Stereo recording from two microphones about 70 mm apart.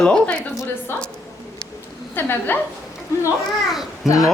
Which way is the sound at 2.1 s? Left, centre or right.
Left.